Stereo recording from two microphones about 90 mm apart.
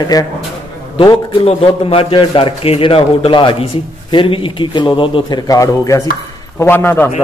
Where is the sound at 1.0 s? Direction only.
75° left (ahead or behind).